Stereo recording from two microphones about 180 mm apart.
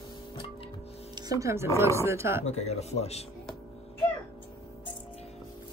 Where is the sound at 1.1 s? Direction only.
20° right (ahead or behind).